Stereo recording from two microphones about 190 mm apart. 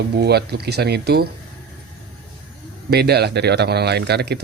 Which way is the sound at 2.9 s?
60° right (ahead or behind).